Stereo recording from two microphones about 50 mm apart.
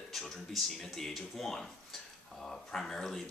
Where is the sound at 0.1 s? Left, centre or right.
Centre.